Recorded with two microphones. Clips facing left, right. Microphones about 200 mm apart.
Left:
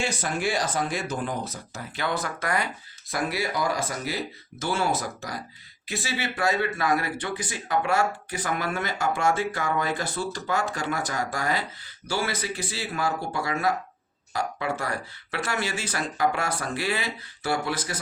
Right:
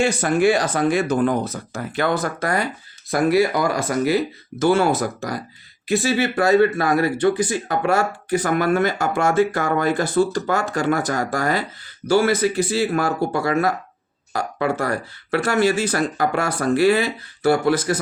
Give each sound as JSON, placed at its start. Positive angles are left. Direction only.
{"t": 0.0, "sound": "speech", "side_deg": -55}
{"t": 3.1, "sound": "speech", "side_deg": -55}
{"t": 6.0, "sound": "speech", "side_deg": -45}